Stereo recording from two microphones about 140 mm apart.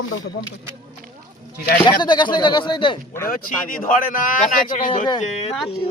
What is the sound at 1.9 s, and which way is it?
Speech, 35° left (ahead or behind).